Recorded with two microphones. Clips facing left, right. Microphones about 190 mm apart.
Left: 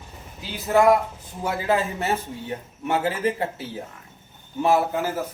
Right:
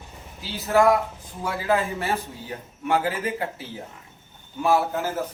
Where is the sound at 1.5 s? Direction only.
25° left (ahead or behind).